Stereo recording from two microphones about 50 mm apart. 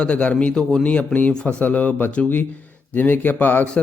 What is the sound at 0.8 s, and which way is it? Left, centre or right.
Speech, left.